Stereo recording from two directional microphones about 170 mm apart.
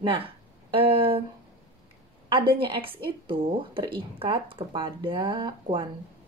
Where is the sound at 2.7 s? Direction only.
30° right (ahead or behind).